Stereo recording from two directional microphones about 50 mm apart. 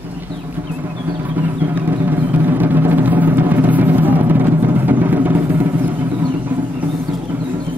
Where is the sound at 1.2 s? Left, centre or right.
Right.